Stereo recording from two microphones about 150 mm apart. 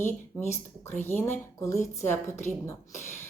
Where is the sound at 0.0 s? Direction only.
15° left (ahead or behind).